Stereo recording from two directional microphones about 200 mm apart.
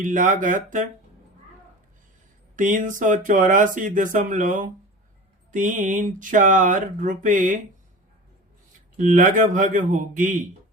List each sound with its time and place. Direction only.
0.0 s speech: 40° right (ahead or behind)
2.6 s speech: 40° right (ahead or behind)
9.0 s speech: 40° right (ahead or behind)